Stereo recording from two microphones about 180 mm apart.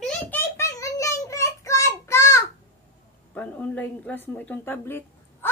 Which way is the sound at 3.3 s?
10° left (ahead or behind).